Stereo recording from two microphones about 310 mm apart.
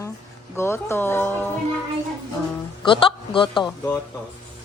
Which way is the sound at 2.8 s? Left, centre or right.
Centre.